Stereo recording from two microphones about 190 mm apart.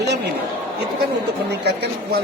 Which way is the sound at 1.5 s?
60° right (ahead or behind).